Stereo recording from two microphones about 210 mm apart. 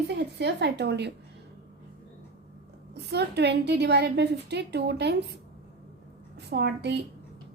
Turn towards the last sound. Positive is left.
turn(degrees=-55)  # may be behind; listen again after turning